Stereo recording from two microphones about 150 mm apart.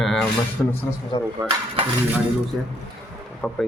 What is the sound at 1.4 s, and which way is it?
Speech, 25° right (ahead or behind).